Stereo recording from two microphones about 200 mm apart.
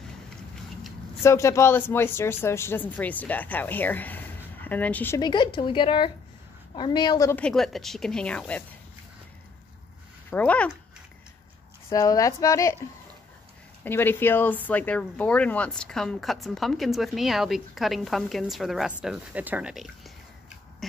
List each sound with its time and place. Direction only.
1.2 s a woman's voice: 15° left (ahead or behind)
10.3 s a woman's voice: 5° left (ahead or behind)
11.9 s a woman's voice: 15° left (ahead or behind)
13.8 s speech: 10° left (ahead or behind)